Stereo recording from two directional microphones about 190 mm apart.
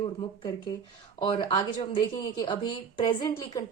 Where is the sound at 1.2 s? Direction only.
30° left (ahead or behind).